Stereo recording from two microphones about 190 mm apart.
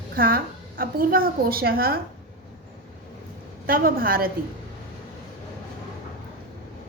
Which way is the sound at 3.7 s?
50° right (ahead or behind).